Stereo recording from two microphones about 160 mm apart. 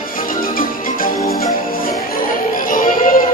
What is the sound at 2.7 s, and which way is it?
Music, 55° left (ahead or behind).